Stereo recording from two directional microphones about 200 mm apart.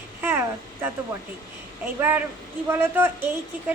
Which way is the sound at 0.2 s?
10° right (ahead or behind).